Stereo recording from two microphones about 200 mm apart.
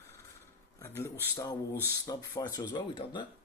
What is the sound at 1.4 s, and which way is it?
Speech, 15° left (ahead or behind).